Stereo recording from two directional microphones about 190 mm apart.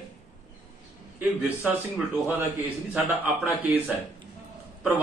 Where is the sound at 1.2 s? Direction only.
10° right (ahead or behind).